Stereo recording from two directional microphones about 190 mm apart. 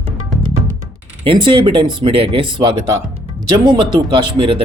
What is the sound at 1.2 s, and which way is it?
Speech, 25° right (ahead or behind).